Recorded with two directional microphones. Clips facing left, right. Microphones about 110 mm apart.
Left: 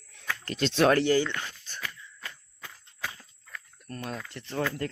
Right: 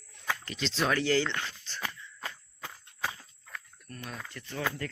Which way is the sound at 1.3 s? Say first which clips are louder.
Even; 15° left (ahead or behind).